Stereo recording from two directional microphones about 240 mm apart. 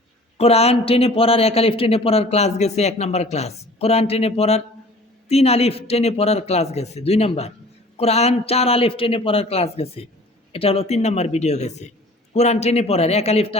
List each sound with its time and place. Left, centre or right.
0.3 s a man's voice: left